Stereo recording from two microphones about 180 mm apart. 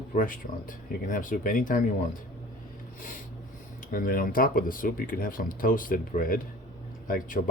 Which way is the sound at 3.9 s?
50° left (ahead or behind).